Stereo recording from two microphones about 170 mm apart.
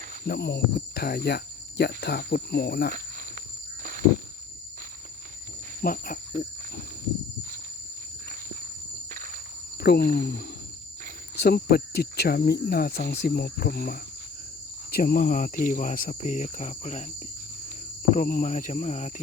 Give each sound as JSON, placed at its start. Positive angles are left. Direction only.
{"t": 0.3, "sound": "speech", "side_deg": 80}
{"t": 3.8, "sound": "a sound", "side_deg": -50}
{"t": 5.8, "sound": "cricket", "side_deg": 60}
{"t": 9.0, "sound": "walk", "side_deg": -50}
{"t": 9.7, "sound": "speech", "side_deg": 70}
{"t": 18.2, "sound": "speech", "side_deg": 55}